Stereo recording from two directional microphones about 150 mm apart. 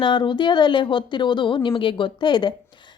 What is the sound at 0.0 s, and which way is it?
A woman's voice, 30° left (ahead or behind).